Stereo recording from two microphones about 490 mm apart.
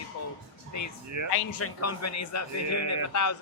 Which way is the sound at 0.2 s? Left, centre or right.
Left.